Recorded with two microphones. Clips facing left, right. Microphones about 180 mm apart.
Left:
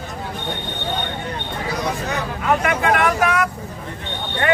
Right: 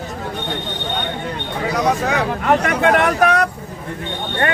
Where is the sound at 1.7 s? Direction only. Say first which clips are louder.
Right 7 dB; 85° right.